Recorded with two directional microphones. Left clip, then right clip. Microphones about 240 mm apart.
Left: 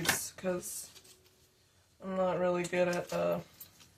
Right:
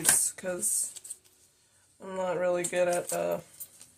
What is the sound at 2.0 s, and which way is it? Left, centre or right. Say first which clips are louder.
Speech: right 1 dB; right.